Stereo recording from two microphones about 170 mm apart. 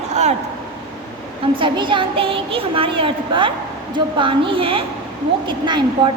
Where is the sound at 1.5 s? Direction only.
30° right (ahead or behind).